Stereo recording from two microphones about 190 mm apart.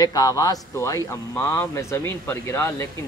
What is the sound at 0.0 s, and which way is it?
Speech, 20° left (ahead or behind).